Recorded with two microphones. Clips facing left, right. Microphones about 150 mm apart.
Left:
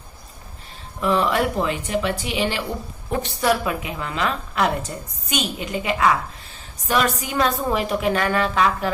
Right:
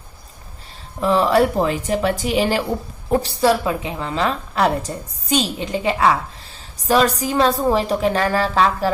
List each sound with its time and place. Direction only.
1.0 s a woman's voice: 35° right (ahead or behind)